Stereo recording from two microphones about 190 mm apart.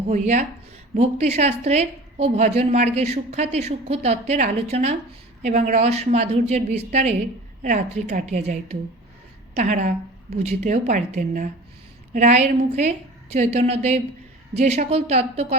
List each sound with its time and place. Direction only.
0.1 s a woman's voice: 40° right (ahead or behind)